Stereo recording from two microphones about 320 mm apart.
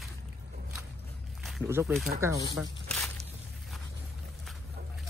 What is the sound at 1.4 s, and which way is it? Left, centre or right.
Speech, centre.